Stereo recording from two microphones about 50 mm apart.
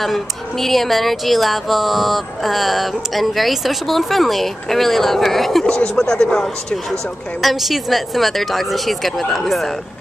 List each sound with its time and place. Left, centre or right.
0.0 s speech: centre
5.7 s speech: centre
7.4 s speech: centre